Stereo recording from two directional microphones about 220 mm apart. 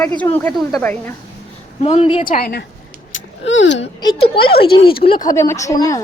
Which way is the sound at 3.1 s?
60° left (ahead or behind).